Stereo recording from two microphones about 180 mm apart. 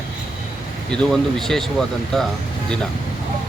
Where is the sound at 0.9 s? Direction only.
Centre (ahead or behind).